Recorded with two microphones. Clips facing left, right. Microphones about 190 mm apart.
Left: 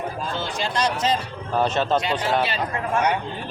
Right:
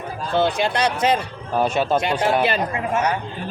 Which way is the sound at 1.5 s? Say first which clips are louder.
Right 2 dB; 10° right (ahead or behind).